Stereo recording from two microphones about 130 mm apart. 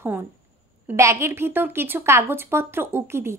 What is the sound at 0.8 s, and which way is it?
A woman's voice, 20° right (ahead or behind).